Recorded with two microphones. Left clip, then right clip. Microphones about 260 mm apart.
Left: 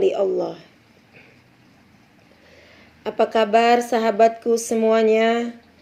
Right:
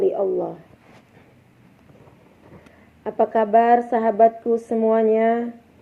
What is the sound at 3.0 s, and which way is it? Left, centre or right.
Speech, left.